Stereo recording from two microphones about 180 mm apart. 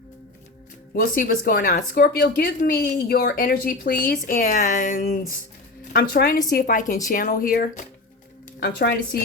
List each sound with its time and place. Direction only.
0.9 s speech: 50° left (ahead or behind)
5.9 s a woman's voice: 60° left (ahead or behind)